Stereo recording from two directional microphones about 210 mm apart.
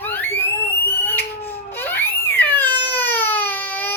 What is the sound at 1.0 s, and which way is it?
Crying, 10° left (ahead or behind).